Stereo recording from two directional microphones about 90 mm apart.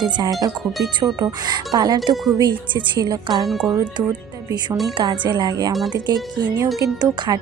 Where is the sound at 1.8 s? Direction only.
50° right (ahead or behind).